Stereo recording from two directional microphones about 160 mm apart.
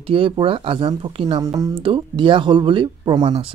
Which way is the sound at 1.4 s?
20° right (ahead or behind).